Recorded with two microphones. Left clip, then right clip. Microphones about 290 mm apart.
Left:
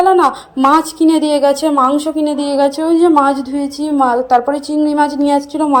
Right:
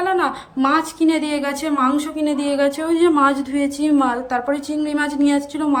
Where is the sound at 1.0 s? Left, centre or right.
Centre.